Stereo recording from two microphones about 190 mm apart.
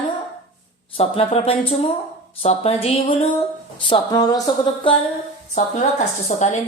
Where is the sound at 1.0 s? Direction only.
30° left (ahead or behind).